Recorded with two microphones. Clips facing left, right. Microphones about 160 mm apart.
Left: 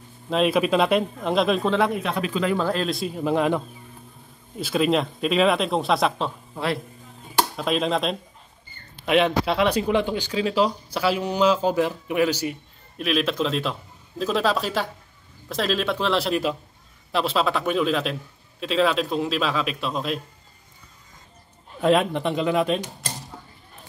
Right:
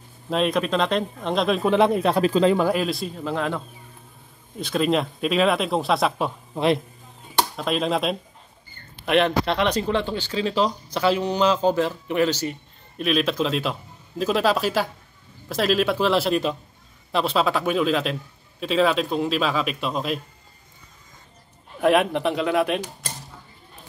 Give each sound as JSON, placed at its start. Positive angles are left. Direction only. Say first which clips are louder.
{"t": 0.3, "sound": "a man's voice", "louder": "left 2 dB", "side_deg": 5}
{"t": 1.9, "sound": "speech", "louder": "right 6 dB", "side_deg": -35}
{"t": 2.5, "sound": "speech", "louder": "right 2 dB", "side_deg": -10}
{"t": 3.2, "sound": "speech", "louder": "left 8 dB", "side_deg": 15}
{"t": 4.6, "sound": "a man's voice", "louder": "even", "side_deg": 5}
{"t": 6.5, "sound": "a man's voice", "louder": "right 7 dB", "side_deg": -20}
{"t": 7.3, "sound": "a man's voice", "louder": "left 1 dB", "side_deg": 0}
{"t": 21.8, "sound": "speech", "louder": "right 1 dB", "side_deg": -5}